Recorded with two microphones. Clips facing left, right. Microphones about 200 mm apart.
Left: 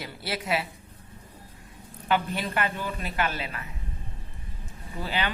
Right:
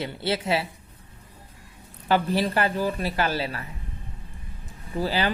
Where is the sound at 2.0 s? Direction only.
35° right (ahead or behind).